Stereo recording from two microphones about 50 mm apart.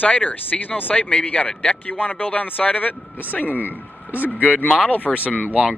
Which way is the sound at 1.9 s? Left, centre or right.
Left.